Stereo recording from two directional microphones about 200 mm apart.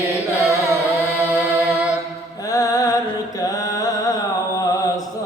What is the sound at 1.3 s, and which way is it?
Mantra, 5° right (ahead or behind).